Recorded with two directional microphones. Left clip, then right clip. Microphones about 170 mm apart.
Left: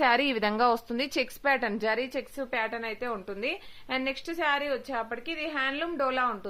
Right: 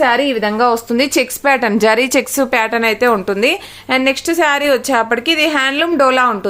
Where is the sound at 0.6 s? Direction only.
15° left (ahead or behind).